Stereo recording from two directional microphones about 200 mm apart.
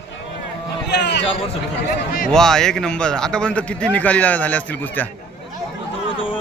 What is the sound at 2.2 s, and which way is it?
Speech, centre (ahead or behind).